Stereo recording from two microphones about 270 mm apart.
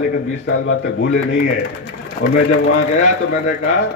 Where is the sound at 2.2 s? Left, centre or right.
Left.